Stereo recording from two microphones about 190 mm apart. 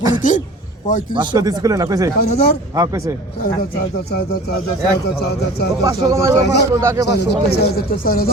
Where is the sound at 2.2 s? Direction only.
50° left (ahead or behind).